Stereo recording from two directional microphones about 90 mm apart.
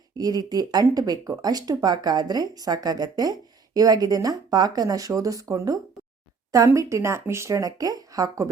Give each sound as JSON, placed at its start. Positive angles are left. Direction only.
{"t": 0.2, "sound": "speech", "side_deg": -45}